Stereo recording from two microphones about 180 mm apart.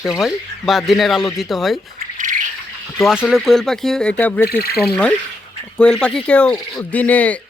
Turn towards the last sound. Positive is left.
turn(degrees=10)  # may be behind; listen again after turning